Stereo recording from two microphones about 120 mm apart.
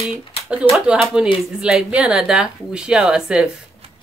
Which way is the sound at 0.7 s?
5° right (ahead or behind).